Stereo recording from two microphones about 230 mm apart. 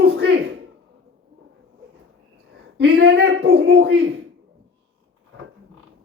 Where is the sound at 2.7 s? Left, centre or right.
Right.